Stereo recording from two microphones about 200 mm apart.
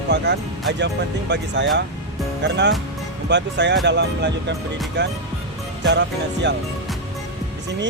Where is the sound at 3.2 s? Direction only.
60° right (ahead or behind).